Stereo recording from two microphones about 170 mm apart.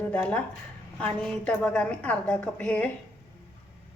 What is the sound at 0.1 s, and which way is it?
A woman's voice, 5° left (ahead or behind).